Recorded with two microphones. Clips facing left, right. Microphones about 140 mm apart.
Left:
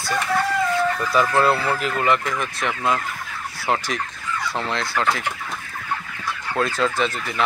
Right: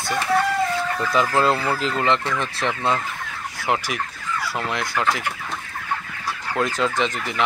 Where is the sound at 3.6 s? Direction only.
15° right (ahead or behind).